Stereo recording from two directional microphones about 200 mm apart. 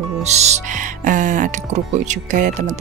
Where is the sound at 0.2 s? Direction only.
35° right (ahead or behind).